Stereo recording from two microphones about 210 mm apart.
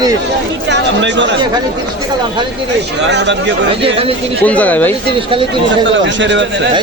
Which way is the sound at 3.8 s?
25° right (ahead or behind).